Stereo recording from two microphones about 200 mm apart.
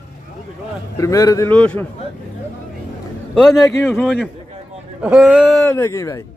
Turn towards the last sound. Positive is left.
turn(degrees=15)  # may be behind; listen again after turning